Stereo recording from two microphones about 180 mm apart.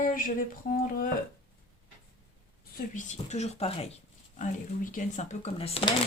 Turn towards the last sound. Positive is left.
turn(degrees=30)  # may be behind; listen again after turning